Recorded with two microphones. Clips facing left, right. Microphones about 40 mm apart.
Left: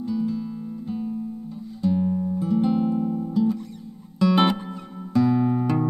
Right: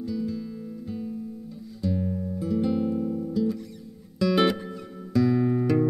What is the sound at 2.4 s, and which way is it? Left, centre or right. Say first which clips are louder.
Music: left 3 dB; centre.